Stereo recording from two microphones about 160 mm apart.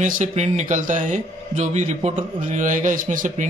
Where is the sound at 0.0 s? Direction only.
45° right (ahead or behind).